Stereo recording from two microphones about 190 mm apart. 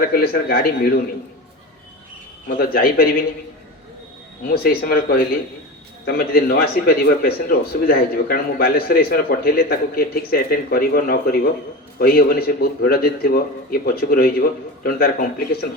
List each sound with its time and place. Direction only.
0.1 s a man's voice: 50° left (ahead or behind)
2.6 s a man's voice: 50° left (ahead or behind)
4.4 s a man's voice: 55° left (ahead or behind)